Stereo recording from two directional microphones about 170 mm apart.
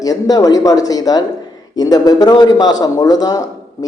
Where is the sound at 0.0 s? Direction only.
20° left (ahead or behind).